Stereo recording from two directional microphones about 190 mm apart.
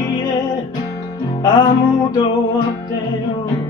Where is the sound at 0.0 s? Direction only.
20° left (ahead or behind).